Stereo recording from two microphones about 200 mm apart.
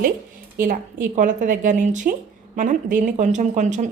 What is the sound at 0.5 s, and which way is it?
A woman's voice, 45° right (ahead or behind).